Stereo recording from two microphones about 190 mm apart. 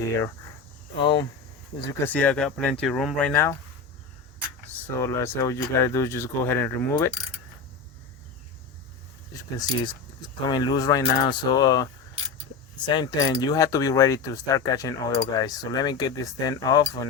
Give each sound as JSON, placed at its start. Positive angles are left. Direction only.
{"t": 1.0, "sound": "speech", "side_deg": 25}
{"t": 2.0, "sound": "speech", "side_deg": 5}
{"t": 4.9, "sound": "speech", "side_deg": 15}
{"t": 9.3, "sound": "speech", "side_deg": 20}